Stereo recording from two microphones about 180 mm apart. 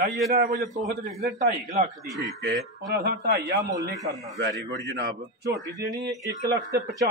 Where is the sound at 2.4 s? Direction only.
70° right (ahead or behind).